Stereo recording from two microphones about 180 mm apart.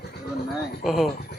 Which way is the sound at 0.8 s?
Centre (ahead or behind).